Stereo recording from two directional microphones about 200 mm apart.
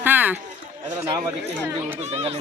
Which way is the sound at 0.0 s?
10° right (ahead or behind).